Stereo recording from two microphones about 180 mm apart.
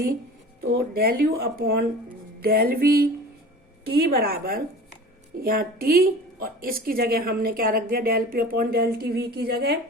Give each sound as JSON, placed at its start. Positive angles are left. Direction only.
{"t": 0.7, "sound": "speech", "side_deg": -60}